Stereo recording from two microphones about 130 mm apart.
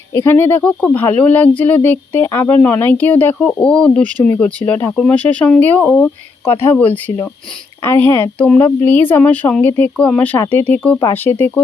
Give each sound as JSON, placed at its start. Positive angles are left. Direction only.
{"t": 0.1, "sound": "speech", "side_deg": 20}